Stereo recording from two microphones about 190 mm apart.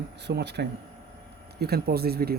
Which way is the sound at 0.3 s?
60° right (ahead or behind).